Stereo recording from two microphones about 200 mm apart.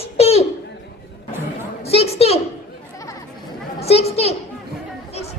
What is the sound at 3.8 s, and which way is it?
Children playing, 30° left (ahead or behind).